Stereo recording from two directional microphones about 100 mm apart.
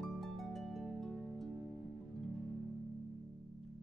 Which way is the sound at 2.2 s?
Centre (ahead or behind).